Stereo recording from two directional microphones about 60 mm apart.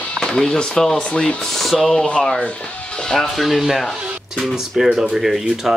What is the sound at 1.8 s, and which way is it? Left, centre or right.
Speech, centre.